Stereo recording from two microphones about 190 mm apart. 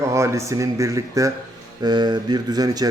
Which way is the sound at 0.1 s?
15° right (ahead or behind).